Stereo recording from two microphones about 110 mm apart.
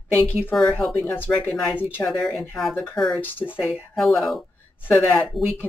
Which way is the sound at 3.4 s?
20° left (ahead or behind).